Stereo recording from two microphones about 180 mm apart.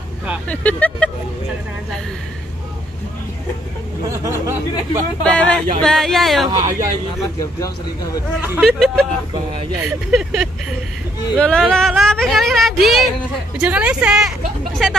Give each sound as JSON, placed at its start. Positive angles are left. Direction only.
{"t": 0.5, "sound": "speech", "side_deg": 10}
{"t": 4.2, "sound": "a sound", "side_deg": -15}
{"t": 5.2, "sound": "speech", "side_deg": 5}
{"t": 6.5, "sound": "speech", "side_deg": -20}
{"t": 8.4, "sound": "speech", "side_deg": 0}
{"t": 10.1, "sound": "a woman's voice", "side_deg": 0}